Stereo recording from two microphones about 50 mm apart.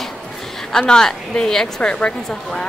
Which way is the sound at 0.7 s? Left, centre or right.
Centre.